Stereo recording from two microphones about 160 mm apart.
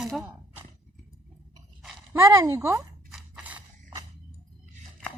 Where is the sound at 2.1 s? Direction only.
20° right (ahead or behind).